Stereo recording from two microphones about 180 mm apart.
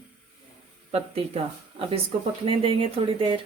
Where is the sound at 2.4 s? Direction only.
30° right (ahead or behind).